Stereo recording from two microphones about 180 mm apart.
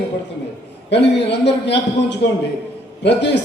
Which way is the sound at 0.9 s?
70° left (ahead or behind).